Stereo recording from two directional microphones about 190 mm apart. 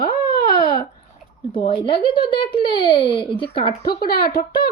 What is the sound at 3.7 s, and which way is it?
Speech, 55° left (ahead or behind).